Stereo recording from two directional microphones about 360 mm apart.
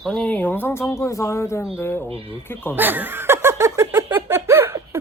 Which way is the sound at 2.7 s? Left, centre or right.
Centre.